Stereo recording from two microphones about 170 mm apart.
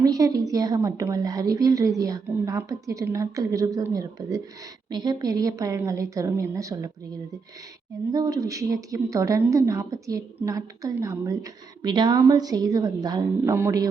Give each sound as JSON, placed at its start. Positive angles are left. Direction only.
{"t": 0.0, "sound": "a woman's voice", "side_deg": -20}
{"t": 8.1, "sound": "a woman's voice", "side_deg": -20}